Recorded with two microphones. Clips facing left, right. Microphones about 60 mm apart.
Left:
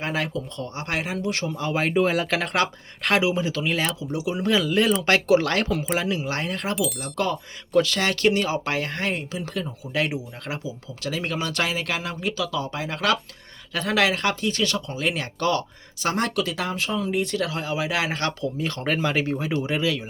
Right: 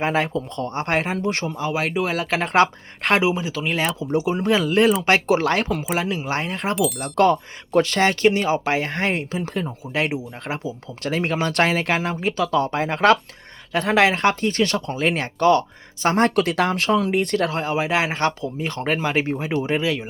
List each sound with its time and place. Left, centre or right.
0.0 s speech: right
1.5 s speech: centre
1.7 s speech: centre
2.5 s speech: right
3.3 s speech: centre
4.1 s speech: right
5.0 s speech: right
6.7 s speech: centre
7.0 s speech: right
9.1 s speech: right
9.9 s speech: right
10.6 s speech: right
12.5 s speech: right
16.3 s speech: right